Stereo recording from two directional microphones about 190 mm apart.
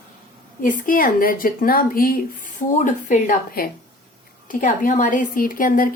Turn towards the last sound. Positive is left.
turn(degrees=45)  # may be behind; listen again after turning